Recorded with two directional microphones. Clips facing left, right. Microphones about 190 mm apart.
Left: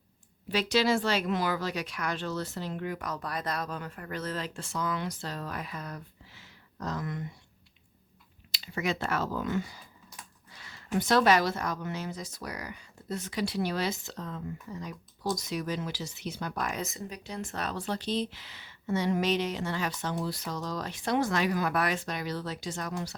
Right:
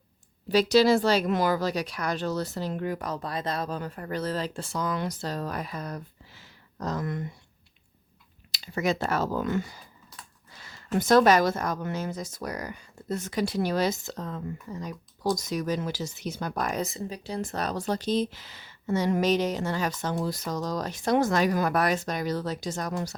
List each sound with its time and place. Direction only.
0.4 s speech: 40° right (ahead or behind)
8.5 s speech: 40° right (ahead or behind)
10.7 s speech: 45° right (ahead or behind)